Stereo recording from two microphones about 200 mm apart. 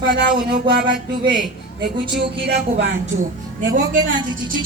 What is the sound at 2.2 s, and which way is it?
Speech, 55° right (ahead or behind).